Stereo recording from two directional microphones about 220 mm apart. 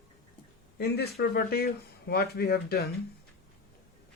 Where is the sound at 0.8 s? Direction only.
45° left (ahead or behind).